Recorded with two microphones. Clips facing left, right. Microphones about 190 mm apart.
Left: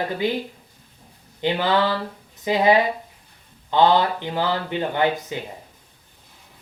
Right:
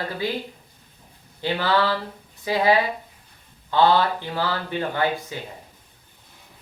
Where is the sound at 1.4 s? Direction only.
20° left (ahead or behind).